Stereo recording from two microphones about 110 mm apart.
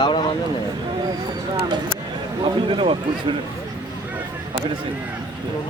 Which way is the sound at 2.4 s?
50° right (ahead or behind).